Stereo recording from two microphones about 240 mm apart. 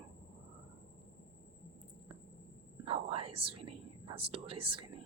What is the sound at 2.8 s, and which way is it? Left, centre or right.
Speech, right.